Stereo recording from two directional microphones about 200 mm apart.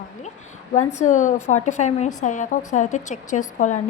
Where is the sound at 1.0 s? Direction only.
40° left (ahead or behind).